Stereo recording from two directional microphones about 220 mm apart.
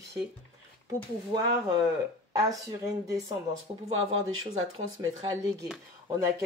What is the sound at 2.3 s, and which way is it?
Speech, 15° right (ahead or behind).